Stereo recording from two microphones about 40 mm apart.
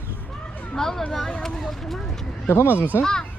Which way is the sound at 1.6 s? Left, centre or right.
Centre.